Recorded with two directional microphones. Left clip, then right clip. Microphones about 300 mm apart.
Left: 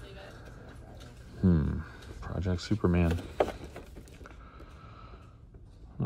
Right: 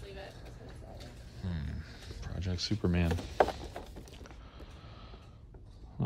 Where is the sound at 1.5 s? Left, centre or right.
Centre.